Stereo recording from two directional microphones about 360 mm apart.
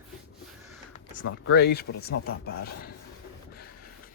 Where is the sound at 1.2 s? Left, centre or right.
Left.